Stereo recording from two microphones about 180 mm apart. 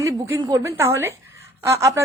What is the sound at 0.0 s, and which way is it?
Speech, 20° right (ahead or behind).